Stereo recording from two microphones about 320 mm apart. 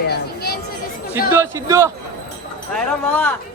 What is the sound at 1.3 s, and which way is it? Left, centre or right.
Speech, centre.